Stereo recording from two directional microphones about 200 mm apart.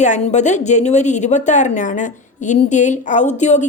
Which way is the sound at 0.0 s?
35° left (ahead or behind).